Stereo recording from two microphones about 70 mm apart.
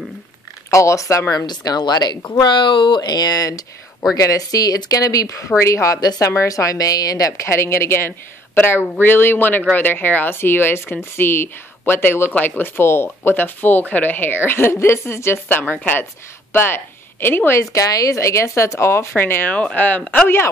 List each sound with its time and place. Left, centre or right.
0.7 s speech: left
1.4 s speech: left
5.6 s speech: left
5.9 s speech: left
6.2 s speech: left
7.4 s speech: left
17.6 s speech: left
19.5 s speech: left